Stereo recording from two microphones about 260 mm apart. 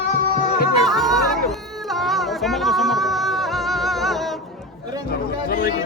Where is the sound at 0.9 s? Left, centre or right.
Centre.